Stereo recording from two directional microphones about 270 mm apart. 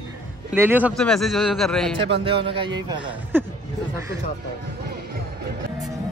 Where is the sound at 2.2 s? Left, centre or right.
Centre.